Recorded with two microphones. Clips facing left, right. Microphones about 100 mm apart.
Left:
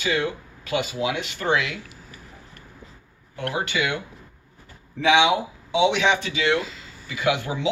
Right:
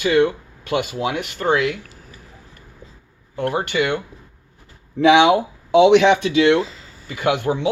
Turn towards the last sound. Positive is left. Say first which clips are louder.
# right 4 dB
turn(degrees=-50)  # may be behind; listen again after turning